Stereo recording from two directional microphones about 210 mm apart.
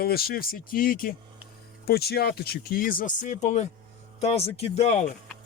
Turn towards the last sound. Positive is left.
turn(degrees=35)  # may be behind; listen again after turning